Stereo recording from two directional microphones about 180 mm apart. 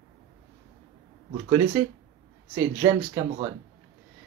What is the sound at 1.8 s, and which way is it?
Speech, 15° right (ahead or behind).